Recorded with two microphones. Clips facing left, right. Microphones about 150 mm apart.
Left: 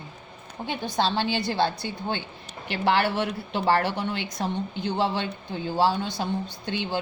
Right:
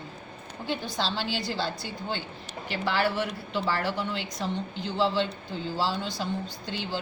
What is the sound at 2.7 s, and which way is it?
Speech, 65° left (ahead or behind).